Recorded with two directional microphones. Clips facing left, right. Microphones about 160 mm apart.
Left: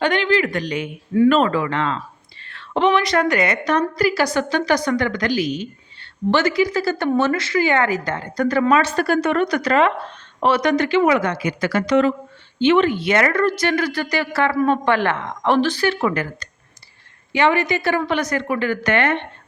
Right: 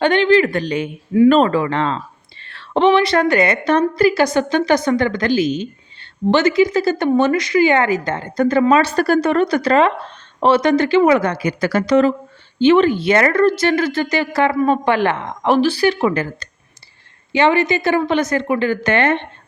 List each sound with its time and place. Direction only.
0.0 s a woman's voice: 30° right (ahead or behind)
8.7 s a woman's voice: 35° right (ahead or behind)